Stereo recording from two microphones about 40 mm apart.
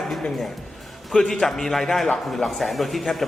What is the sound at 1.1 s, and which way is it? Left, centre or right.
A man's voice, centre.